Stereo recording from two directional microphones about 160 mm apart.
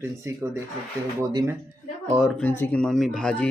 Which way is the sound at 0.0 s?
15° right (ahead or behind).